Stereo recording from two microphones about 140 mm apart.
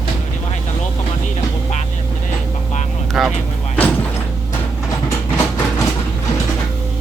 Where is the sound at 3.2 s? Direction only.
Centre (ahead or behind).